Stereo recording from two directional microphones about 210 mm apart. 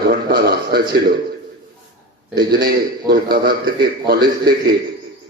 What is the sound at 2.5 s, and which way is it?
A man's voice, 45° right (ahead or behind).